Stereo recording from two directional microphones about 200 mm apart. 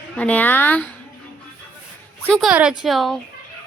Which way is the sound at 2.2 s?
Centre (ahead or behind).